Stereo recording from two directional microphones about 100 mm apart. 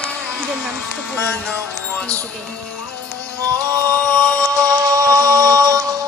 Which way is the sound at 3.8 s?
15° left (ahead or behind).